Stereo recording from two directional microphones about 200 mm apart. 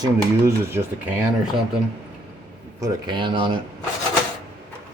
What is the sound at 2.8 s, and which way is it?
Speech, 20° right (ahead or behind).